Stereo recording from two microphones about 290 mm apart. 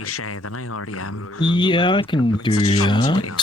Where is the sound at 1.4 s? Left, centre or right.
Centre.